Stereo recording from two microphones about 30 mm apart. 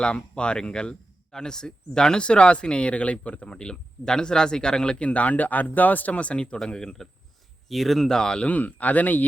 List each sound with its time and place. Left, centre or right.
0.0 s speech: left
3.5 s speech: left
6.3 s speech: left
7.0 s speech: centre
7.7 s speech: centre
8.1 s speech: left
8.4 s speech: left